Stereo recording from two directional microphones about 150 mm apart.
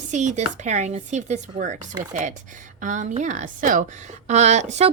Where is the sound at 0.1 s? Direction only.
55° right (ahead or behind).